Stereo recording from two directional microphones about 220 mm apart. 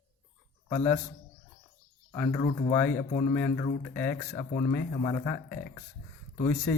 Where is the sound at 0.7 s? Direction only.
5° left (ahead or behind).